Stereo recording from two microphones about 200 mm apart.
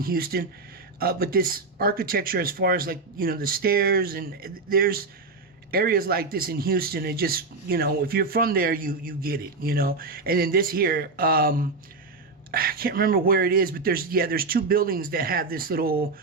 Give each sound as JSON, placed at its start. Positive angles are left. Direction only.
{"t": 0.0, "sound": "speech", "side_deg": -45}